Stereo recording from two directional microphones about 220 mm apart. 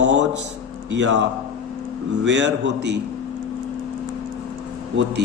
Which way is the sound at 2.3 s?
55° right (ahead or behind).